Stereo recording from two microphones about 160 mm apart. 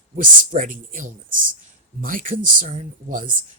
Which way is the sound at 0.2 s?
55° right (ahead or behind).